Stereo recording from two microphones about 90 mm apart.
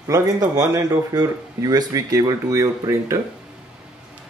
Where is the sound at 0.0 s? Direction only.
40° right (ahead or behind).